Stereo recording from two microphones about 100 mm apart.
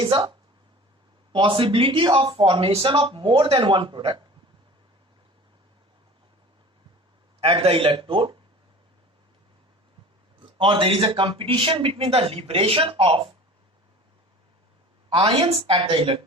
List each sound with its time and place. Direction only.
0.0 s speech: 55° right (ahead or behind)
7.4 s speech: 70° right (ahead or behind)
10.6 s speech: 55° right (ahead or behind)
15.1 s a woman's voice: 65° right (ahead or behind)